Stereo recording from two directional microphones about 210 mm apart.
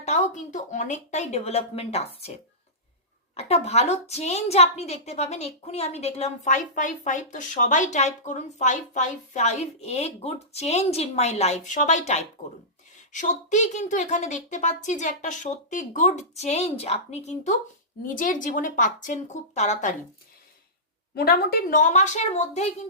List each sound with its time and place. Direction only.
0.0 s a woman's voice: 35° left (ahead or behind)
3.3 s a woman's voice: 30° left (ahead or behind)
21.2 s a woman's voice: 45° left (ahead or behind)